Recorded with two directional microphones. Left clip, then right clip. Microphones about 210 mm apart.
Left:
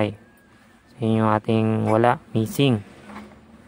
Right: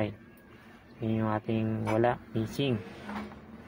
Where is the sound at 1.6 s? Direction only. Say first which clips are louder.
Left 10 dB; 50° left (ahead or behind).